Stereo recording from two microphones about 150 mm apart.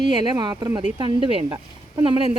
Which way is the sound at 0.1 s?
30° right (ahead or behind).